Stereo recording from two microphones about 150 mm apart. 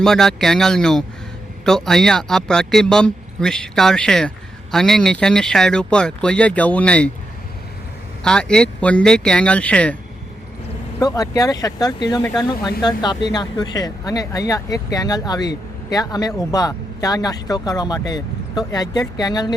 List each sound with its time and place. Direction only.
0.0 s speech: 5° left (ahead or behind)
8.2 s speech: 5° left (ahead or behind)
11.0 s speech: 25° left (ahead or behind)